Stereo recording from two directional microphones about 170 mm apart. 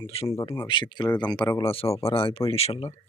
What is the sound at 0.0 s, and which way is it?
Speech, 35° left (ahead or behind).